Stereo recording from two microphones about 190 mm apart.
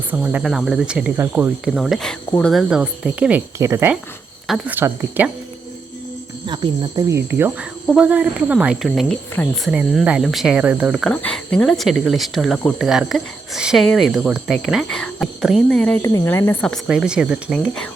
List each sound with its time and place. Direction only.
0.1 s speech: 10° right (ahead or behind)
6.4 s speech: 25° right (ahead or behind)
7.3 s speech: 10° right (ahead or behind)
16.0 s speech: 15° left (ahead or behind)
16.8 s speech: 5° right (ahead or behind)